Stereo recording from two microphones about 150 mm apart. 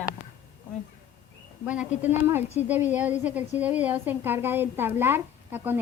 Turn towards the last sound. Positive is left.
turn(degrees=-15)  # may be behind; listen again after turning